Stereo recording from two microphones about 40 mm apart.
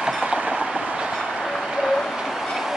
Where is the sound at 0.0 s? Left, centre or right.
Right.